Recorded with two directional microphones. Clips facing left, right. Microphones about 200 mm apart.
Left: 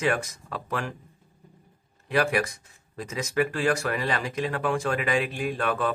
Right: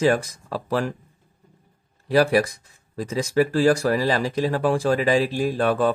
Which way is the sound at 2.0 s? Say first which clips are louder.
Right 6 dB; 35° right (ahead or behind).